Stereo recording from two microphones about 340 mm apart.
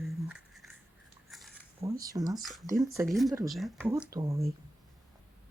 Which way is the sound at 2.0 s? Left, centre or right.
Centre.